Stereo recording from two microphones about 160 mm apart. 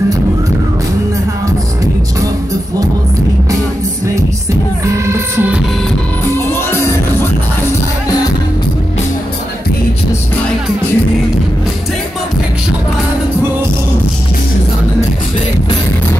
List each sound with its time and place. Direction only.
4.8 s music: 20° right (ahead or behind)
6.5 s music: 15° left (ahead or behind)